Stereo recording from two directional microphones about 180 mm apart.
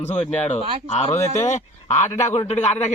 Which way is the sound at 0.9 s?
35° left (ahead or behind).